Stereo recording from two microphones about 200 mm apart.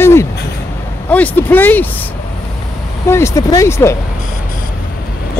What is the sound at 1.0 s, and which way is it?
Speech, 10° left (ahead or behind).